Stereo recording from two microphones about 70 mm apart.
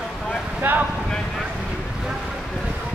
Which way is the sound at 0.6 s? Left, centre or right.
Right.